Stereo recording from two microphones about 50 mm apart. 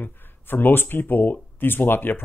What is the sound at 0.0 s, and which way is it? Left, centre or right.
Speech, left.